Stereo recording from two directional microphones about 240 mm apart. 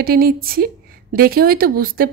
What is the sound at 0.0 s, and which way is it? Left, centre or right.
Speech, right.